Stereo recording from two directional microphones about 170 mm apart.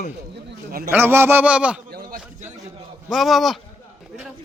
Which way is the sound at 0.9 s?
15° right (ahead or behind).